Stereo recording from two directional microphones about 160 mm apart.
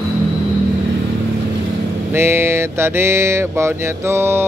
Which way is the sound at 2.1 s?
15° right (ahead or behind).